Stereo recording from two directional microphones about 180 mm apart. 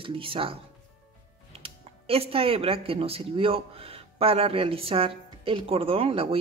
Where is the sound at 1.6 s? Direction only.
30° right (ahead or behind).